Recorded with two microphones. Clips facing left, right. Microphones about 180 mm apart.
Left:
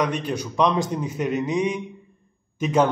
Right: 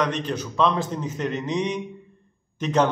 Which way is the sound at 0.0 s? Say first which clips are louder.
Left 1 dB; 10° left (ahead or behind).